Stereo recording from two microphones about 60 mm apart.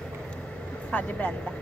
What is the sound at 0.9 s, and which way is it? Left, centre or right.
Speech, left.